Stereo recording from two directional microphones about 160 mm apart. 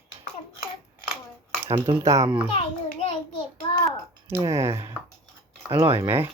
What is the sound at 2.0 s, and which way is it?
Speech, 20° right (ahead or behind).